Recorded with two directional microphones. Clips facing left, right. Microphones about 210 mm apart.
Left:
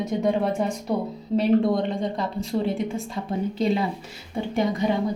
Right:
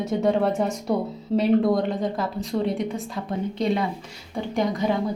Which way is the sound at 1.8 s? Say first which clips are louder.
Right 1 dB; 5° right (ahead or behind).